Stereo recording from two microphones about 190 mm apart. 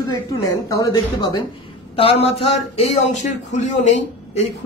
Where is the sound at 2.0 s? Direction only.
30° left (ahead or behind).